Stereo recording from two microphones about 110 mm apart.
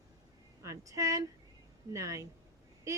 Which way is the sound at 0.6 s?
30° right (ahead or behind).